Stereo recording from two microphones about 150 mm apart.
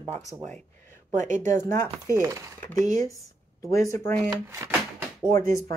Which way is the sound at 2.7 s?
20° left (ahead or behind).